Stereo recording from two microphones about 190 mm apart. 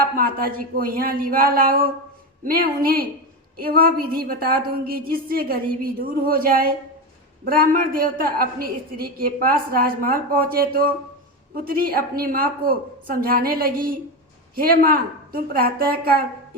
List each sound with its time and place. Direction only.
0.0 s a woman's voice: 50° right (ahead or behind)